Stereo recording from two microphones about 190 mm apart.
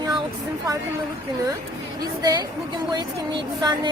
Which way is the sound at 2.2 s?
20° right (ahead or behind).